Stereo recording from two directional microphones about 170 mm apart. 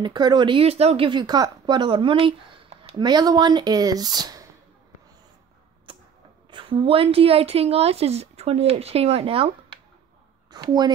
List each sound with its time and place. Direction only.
0.0 s speech: 25° right (ahead or behind)
6.5 s a woman's voice: 30° right (ahead or behind)
10.5 s speech: 25° right (ahead or behind)